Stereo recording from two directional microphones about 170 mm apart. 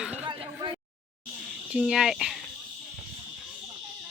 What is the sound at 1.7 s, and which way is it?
Speech, 5° right (ahead or behind).